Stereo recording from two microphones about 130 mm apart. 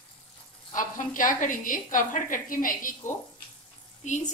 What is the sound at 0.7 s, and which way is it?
A woman's voice, 90° left.